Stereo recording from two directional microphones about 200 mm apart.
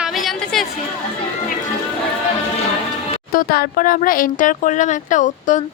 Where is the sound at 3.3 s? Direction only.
45° left (ahead or behind).